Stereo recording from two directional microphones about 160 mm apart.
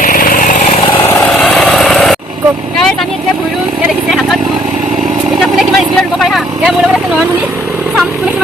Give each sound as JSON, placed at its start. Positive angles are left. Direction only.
{"t": 0.0, "sound": "vehicle", "side_deg": 60}
{"t": 1.3, "sound": "a sound", "side_deg": 0}
{"t": 5.5, "sound": "vehicle", "side_deg": 0}